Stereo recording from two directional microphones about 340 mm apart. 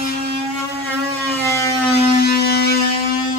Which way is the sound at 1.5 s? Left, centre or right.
Centre.